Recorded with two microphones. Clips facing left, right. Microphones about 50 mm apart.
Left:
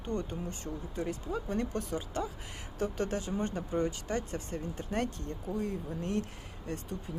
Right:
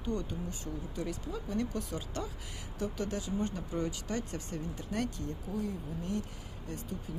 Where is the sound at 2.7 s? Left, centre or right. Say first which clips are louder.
Left 3 dB; left.